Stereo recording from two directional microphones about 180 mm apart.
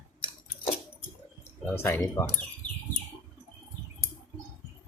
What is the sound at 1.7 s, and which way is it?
Speech, 15° left (ahead or behind).